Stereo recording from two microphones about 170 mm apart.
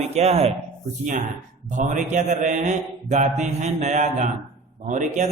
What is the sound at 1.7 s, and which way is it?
A man's voice, 45° right (ahead or behind).